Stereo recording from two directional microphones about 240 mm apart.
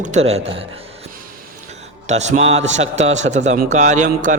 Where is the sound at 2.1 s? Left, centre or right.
Right.